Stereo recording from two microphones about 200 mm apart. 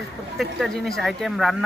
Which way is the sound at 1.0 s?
Centre (ahead or behind).